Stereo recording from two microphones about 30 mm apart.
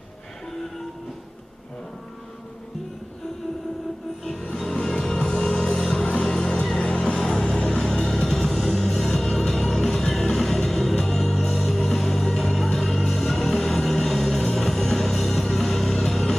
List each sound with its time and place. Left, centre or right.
4.9 s music: centre
7.2 s vehicle: centre
7.8 s music: centre